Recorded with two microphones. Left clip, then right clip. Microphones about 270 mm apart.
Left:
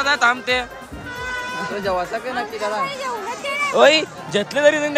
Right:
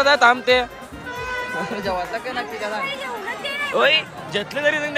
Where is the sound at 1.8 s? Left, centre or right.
Left.